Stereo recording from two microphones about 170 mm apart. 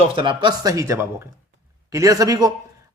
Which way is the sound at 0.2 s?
30° right (ahead or behind).